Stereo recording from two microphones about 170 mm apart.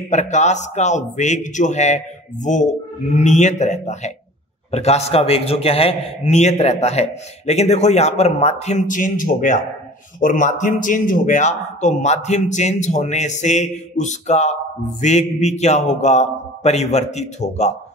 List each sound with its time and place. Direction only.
0.1 s a man's voice: 45° left (ahead or behind)